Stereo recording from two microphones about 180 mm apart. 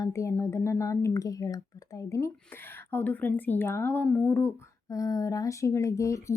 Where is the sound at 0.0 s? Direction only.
15° left (ahead or behind).